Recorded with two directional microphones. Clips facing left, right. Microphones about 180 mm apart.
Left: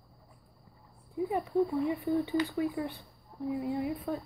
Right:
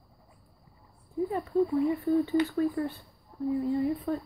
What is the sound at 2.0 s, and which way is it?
Speech, 15° left (ahead or behind).